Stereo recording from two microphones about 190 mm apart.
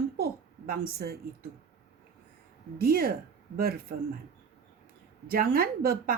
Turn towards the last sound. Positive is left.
turn(degrees=-50)  # may be behind; listen again after turning